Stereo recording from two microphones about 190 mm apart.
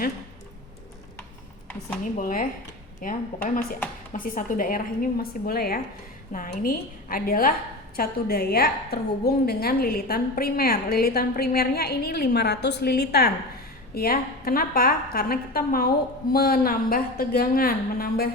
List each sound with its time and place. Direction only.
2.1 s a woman's voice: 45° left (ahead or behind)